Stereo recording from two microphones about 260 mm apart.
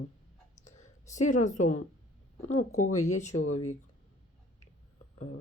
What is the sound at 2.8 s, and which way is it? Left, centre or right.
Speech, left.